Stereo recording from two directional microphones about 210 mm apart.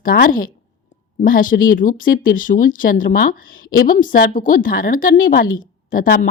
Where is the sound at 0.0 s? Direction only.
40° left (ahead or behind).